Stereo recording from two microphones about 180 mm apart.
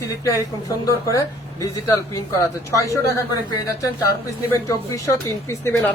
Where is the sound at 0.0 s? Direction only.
15° left (ahead or behind).